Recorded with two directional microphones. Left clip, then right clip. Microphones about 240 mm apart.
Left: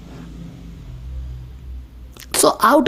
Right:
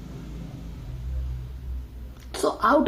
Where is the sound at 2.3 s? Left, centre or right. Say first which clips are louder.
Left 8 dB; left.